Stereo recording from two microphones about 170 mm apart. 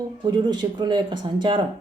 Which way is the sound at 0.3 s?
25° right (ahead or behind).